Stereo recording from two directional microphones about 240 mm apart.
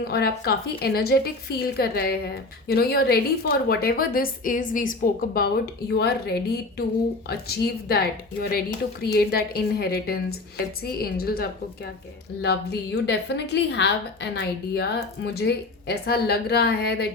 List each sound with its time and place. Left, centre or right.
0.0 s a woman's voice: left